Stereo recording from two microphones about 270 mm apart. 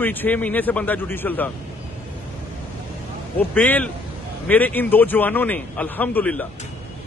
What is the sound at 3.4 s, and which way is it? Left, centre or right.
A man's voice, centre.